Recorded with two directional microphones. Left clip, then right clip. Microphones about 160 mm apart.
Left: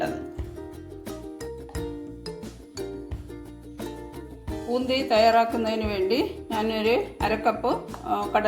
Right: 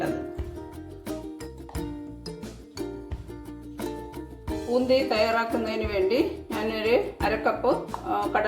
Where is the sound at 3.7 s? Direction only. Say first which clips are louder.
Right 2 dB; centre (ahead or behind).